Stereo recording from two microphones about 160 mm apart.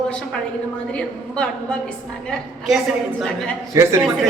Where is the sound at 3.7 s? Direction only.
20° right (ahead or behind).